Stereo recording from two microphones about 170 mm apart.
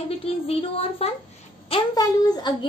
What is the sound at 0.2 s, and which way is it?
Speech, 35° left (ahead or behind).